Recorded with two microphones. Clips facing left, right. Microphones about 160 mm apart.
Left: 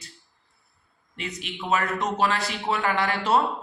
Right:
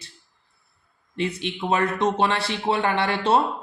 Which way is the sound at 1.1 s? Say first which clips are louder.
Right 8 dB; 30° right (ahead or behind).